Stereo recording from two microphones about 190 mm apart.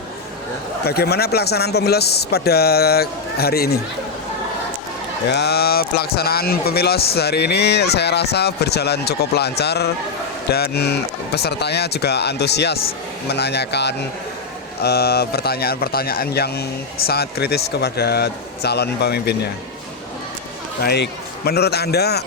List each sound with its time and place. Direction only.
0.9 s speech: 55° left (ahead or behind)
5.3 s speech: 60° left (ahead or behind)
20.8 s speech: 60° left (ahead or behind)